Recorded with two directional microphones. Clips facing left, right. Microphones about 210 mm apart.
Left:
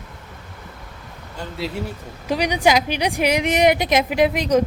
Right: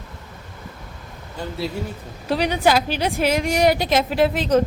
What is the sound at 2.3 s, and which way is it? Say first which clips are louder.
A woman's voice: even; 15° left (ahead or behind).